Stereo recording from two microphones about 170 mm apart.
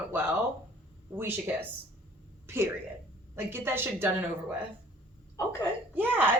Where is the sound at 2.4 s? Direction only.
15° right (ahead or behind).